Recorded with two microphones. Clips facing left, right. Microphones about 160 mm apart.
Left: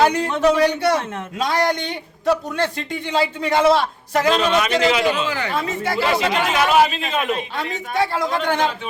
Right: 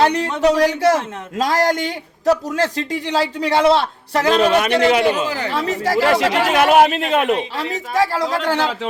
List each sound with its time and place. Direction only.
0.0 s speech: 35° right (ahead or behind)
4.4 s a man's voice: 60° right (ahead or behind)
5.1 s speech: 40° right (ahead or behind)
6.0 s speech: 70° right (ahead or behind)
6.5 s a man's voice: 55° right (ahead or behind)
7.3 s speech: 35° right (ahead or behind)
8.5 s a man's voice: 90° right